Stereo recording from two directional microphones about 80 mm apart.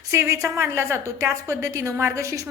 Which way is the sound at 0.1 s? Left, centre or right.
Right.